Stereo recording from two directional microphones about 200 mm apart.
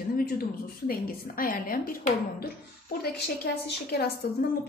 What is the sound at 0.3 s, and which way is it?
A woman's voice, 50° left (ahead or behind).